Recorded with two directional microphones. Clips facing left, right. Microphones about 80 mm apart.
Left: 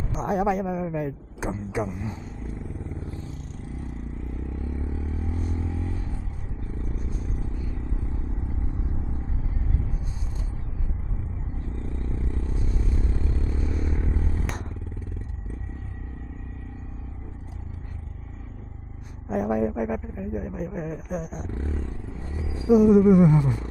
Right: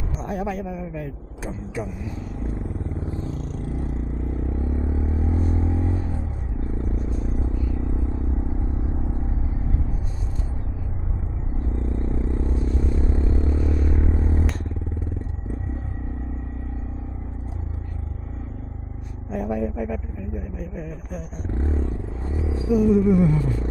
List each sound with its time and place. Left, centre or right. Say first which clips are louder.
0.3 s speech: left 4 dB; centre
3.1 s vehicle: right 7 dB; right
3.3 s vehicle: right 8 dB; right
3.8 s vehicle: right 6 dB; right
11.6 s vehicle: right 8 dB; right
13.9 s music: right 6 dB; right
14.4 s motorcycle: right 5 dB; centre
19.3 s a sound: left 2 dB; centre
21.5 s a sound: right 10 dB; right
22.7 s speech: left 2 dB; centre